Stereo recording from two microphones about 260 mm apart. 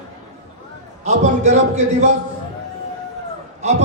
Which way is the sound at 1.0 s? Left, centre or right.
Right.